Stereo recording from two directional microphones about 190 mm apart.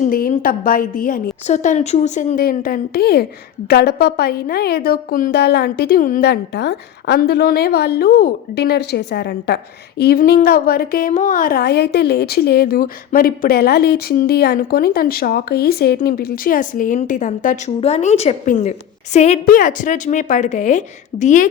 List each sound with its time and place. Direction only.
0.0 s a woman's voice: 45° left (ahead or behind)